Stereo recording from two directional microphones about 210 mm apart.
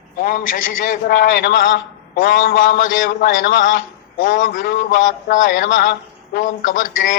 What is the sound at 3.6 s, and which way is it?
A man's voice, 40° left (ahead or behind).